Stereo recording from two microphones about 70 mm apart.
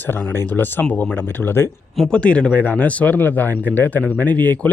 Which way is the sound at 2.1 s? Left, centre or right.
Centre.